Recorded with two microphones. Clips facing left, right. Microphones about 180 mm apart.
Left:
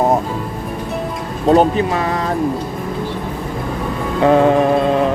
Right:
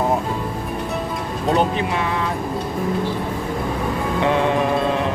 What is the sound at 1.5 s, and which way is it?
Speech, 40° left (ahead or behind).